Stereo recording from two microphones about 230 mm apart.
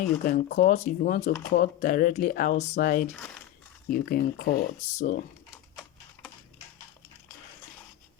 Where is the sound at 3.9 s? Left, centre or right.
Left.